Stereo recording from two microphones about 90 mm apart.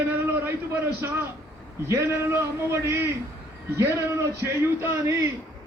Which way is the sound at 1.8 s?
30° right (ahead or behind).